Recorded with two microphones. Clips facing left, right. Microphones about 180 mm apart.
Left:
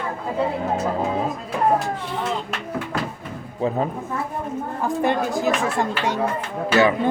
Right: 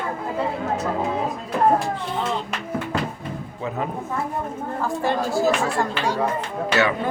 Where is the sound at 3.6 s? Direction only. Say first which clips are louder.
Left 7 dB; 35° left (ahead or behind).